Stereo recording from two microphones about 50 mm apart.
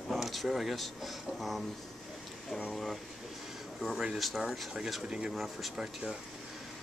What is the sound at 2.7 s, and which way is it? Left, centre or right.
Speech, centre.